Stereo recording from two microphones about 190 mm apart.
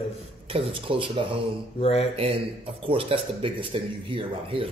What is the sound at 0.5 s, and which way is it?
Speech, 30° right (ahead or behind).